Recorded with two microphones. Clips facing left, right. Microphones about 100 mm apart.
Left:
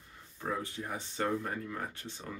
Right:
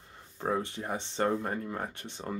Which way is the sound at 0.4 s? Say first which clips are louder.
Right 5 dB; 35° right (ahead or behind).